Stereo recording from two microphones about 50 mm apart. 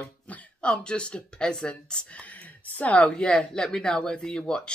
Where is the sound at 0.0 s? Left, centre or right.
Left.